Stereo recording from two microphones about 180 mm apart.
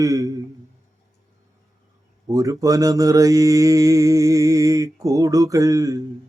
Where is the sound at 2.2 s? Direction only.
15° right (ahead or behind).